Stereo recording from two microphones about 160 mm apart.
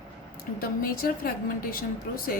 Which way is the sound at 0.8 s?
65° left (ahead or behind).